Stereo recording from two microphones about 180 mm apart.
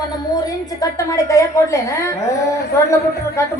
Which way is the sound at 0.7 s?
20° left (ahead or behind).